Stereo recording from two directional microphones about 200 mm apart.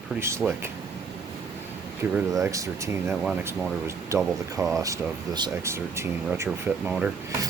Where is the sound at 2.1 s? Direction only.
15° right (ahead or behind).